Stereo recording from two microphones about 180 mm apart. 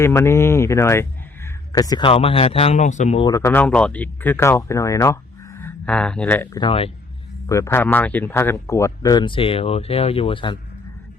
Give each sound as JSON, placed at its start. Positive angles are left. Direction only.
{"t": 0.0, "sound": "speech", "side_deg": 15}
{"t": 3.2, "sound": "speech", "side_deg": 15}
{"t": 6.6, "sound": "speech", "side_deg": 30}
{"t": 7.4, "sound": "speech", "side_deg": 15}